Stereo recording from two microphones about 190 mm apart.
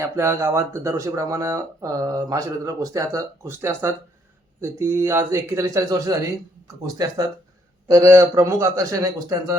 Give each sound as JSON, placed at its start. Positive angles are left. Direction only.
{"t": 0.0, "sound": "speech", "side_deg": -15}